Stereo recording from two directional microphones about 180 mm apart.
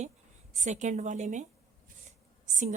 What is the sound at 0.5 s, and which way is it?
A woman's voice, 40° right (ahead or behind).